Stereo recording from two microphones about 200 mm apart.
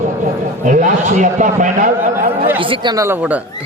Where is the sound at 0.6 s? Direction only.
40° right (ahead or behind).